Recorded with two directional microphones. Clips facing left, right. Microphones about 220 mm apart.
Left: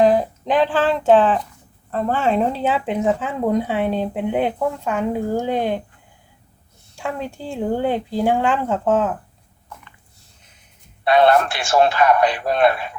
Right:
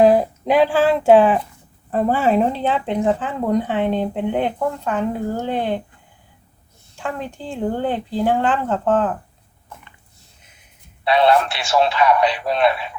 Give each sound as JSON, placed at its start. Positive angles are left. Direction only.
{"t": 0.0, "sound": "speech", "side_deg": -10}
{"t": 6.9, "sound": "speech", "side_deg": 10}
{"t": 11.0, "sound": "a man's voice", "side_deg": 50}